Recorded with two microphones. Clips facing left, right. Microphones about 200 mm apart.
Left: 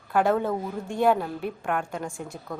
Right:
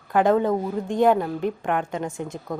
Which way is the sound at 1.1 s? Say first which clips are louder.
Even; 5° left (ahead or behind).